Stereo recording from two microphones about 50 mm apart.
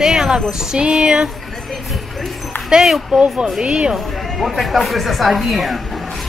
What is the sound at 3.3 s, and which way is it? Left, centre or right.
Speech, centre.